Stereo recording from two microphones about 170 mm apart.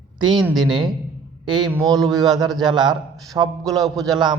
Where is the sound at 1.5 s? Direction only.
25° right (ahead or behind).